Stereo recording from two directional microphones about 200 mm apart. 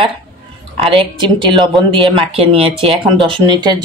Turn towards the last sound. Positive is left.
turn(degrees=-20)  # may be behind; listen again after turning